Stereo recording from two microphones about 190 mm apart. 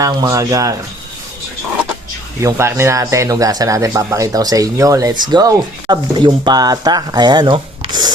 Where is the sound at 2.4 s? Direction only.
15° right (ahead or behind).